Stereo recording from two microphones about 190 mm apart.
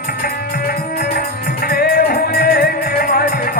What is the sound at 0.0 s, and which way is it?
Music, 55° left (ahead or behind).